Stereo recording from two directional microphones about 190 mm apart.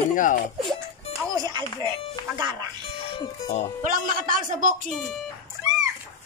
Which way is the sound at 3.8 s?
45° right (ahead or behind).